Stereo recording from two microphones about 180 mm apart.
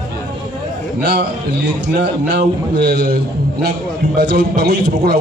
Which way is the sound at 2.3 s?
65° right (ahead or behind).